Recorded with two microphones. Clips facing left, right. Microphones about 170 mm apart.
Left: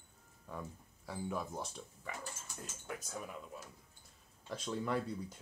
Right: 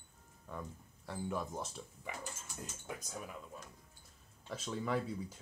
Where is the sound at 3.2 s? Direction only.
5° left (ahead or behind).